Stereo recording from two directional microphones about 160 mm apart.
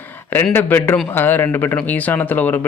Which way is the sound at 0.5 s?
15° left (ahead or behind).